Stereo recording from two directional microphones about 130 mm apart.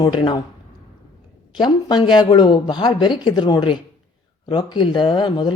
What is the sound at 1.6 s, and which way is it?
Speech, 35° left (ahead or behind).